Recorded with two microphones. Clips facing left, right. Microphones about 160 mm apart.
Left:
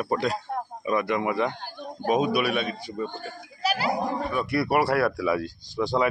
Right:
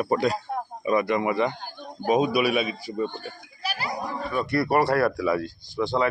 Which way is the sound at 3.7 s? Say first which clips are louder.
Left 5 dB; 90° left.